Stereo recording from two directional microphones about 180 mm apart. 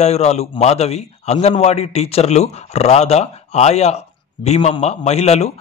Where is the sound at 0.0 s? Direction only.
35° left (ahead or behind).